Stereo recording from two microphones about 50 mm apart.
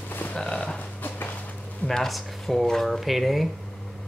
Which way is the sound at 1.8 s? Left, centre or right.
Centre.